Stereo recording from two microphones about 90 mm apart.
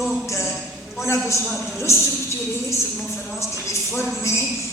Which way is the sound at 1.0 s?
30° left (ahead or behind).